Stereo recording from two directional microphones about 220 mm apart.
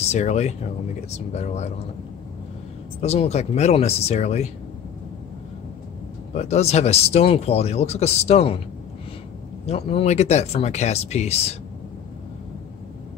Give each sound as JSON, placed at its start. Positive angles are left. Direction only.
{"t": 0.0, "sound": "speech", "side_deg": 30}
{"t": 3.0, "sound": "speech", "side_deg": 30}
{"t": 6.3, "sound": "speech", "side_deg": 30}
{"t": 9.7, "sound": "speech", "side_deg": 25}